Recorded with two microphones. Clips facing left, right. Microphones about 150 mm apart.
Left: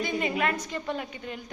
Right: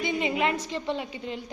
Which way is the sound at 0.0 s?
20° right (ahead or behind).